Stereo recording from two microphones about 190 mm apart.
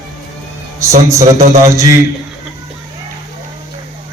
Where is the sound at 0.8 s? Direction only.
15° right (ahead or behind).